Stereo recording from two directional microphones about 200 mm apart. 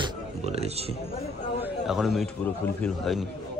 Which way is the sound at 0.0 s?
30° right (ahead or behind).